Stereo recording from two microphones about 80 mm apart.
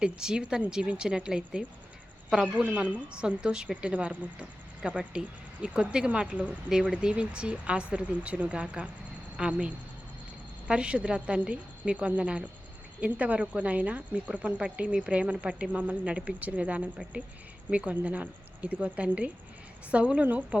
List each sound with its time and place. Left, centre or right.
0.0 s speech: centre